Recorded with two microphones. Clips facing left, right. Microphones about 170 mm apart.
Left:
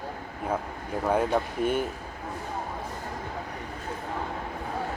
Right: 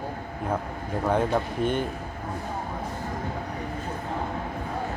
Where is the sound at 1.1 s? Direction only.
5° left (ahead or behind).